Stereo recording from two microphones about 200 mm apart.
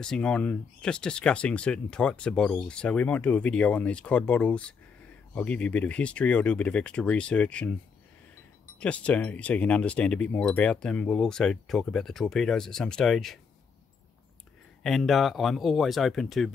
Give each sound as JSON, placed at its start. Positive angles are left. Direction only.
{"t": 0.0, "sound": "speech", "side_deg": 5}
{"t": 8.7, "sound": "speech", "side_deg": 5}
{"t": 14.8, "sound": "speech", "side_deg": 0}